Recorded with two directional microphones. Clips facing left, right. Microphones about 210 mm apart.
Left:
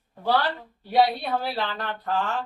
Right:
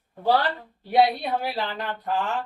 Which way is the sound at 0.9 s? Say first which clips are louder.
Right 1 dB; 15° right (ahead or behind).